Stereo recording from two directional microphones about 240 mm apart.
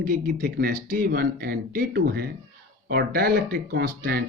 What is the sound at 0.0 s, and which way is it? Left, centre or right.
Speech, right.